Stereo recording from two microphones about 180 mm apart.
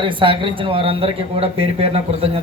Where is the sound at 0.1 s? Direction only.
30° right (ahead or behind).